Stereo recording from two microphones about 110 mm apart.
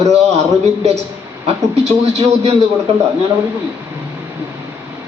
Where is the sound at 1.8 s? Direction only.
65° right (ahead or behind).